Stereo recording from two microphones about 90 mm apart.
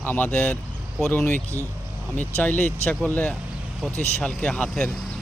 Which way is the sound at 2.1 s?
20° left (ahead or behind).